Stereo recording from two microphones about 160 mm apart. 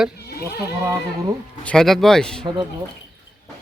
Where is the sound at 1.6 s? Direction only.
5° left (ahead or behind).